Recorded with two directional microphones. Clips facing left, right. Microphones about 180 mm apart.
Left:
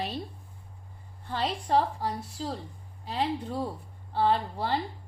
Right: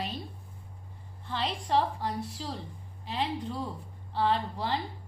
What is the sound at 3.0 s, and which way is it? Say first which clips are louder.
A woman's voice: left 2 dB; 45° left (ahead or behind).